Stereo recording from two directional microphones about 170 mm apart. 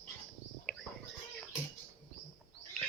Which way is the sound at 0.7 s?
5° left (ahead or behind).